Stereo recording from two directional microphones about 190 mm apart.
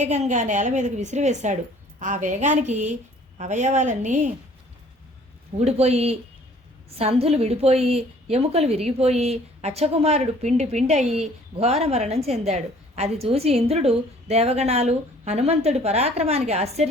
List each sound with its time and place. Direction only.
0.0 s a woman's voice: 35° right (ahead or behind)
5.5 s a woman's voice: 35° right (ahead or behind)